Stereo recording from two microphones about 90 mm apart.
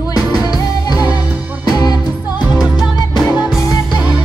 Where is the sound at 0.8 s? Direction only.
45° left (ahead or behind).